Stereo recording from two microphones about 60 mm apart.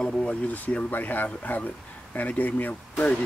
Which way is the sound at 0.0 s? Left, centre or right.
Centre.